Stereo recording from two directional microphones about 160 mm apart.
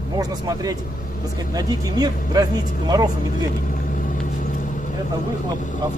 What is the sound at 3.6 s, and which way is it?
Vehicle, 55° left (ahead or behind).